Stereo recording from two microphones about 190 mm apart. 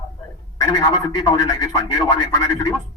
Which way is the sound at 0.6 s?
20° left (ahead or behind).